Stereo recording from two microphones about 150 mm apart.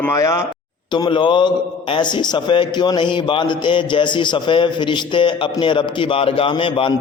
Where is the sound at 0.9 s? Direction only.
30° left (ahead or behind).